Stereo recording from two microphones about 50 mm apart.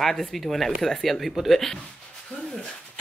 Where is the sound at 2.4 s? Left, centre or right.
Centre.